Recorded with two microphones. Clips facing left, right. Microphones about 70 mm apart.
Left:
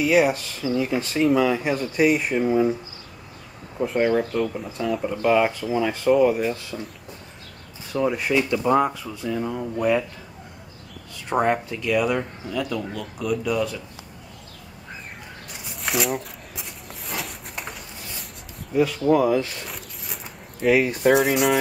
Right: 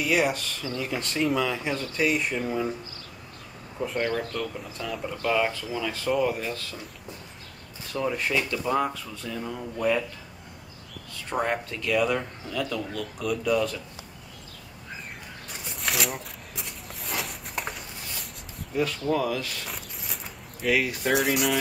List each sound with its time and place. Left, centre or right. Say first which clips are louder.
0.0 s speech: left 6 dB; centre
4.0 s speech: left 9 dB; centre
5.0 s speech: left 5 dB; centre
7.9 s speech: left 5 dB; centre
8.5 s speech: left 6 dB; left
11.2 s speech: left 6 dB; centre
15.5 s a sound: left 4 dB; centre
19.0 s speech: left 8 dB; centre
20.6 s speech: left 6 dB; left
21.3 s speech: left 5 dB; left